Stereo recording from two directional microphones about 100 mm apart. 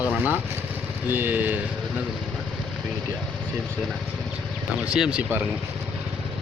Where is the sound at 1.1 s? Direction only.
20° right (ahead or behind).